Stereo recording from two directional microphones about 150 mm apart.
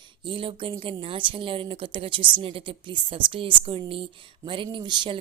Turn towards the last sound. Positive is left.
turn(degrees=-30)  # may be behind; listen again after turning